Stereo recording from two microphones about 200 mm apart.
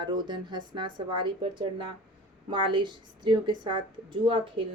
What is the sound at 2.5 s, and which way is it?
A woman's voice, 25° right (ahead or behind).